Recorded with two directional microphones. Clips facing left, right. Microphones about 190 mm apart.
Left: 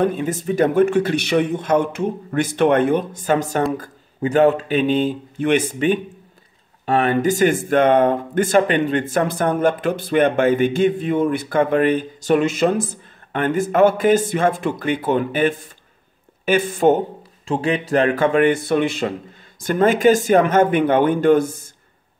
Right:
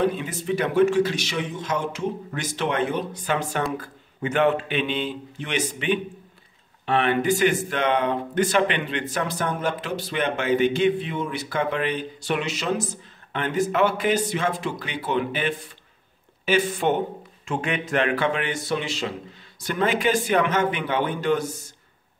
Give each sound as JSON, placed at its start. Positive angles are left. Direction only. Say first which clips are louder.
{"t": 0.0, "sound": "speech", "louder": "left 4 dB", "side_deg": 50}
{"t": 17.5, "sound": "speech", "louder": "left 6 dB", "side_deg": 35}